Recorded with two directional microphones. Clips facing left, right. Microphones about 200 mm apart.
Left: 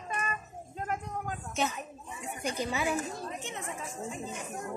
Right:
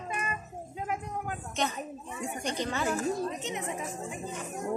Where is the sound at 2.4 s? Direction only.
5° left (ahead or behind).